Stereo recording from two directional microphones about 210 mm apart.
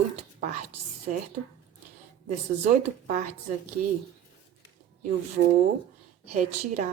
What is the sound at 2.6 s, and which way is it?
Speech, 30° right (ahead or behind).